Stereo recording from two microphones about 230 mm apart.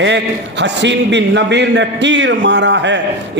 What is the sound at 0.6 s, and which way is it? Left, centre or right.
A man's voice, right.